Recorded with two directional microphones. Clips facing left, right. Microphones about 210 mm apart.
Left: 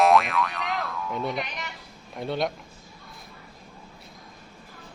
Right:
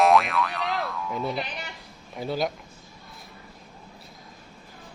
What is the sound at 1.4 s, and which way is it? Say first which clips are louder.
Speech: even; 35° right (ahead or behind).